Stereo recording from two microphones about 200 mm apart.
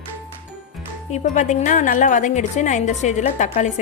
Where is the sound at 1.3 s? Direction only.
35° left (ahead or behind).